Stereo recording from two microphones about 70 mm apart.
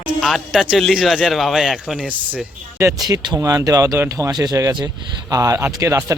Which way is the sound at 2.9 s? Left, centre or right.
Right.